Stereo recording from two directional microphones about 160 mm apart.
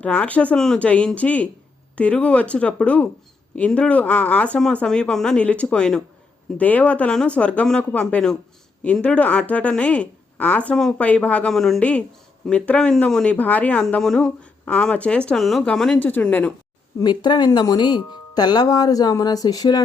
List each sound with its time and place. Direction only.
0.0 s a woman's voice: 10° left (ahead or behind)
17.0 s speech: 25° left (ahead or behind)